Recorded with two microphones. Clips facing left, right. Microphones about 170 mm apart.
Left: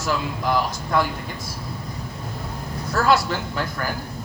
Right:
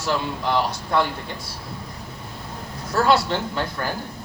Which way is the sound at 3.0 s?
30° right (ahead or behind).